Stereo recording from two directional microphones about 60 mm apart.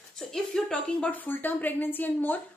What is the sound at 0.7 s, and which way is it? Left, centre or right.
A woman's voice, left.